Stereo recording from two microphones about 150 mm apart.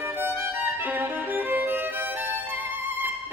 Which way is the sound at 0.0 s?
15° right (ahead or behind).